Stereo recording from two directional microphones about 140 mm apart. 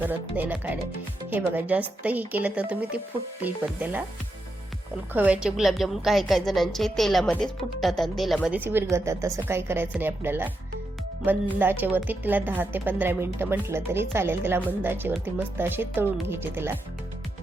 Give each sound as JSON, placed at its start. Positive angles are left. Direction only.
{"t": 0.0, "sound": "a woman's voice", "side_deg": -15}
{"t": 5.1, "sound": "a woman's voice", "side_deg": -10}
{"t": 8.5, "sound": "a woman's voice", "side_deg": -15}